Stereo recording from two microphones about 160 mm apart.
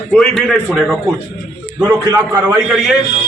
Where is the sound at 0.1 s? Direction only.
5° left (ahead or behind).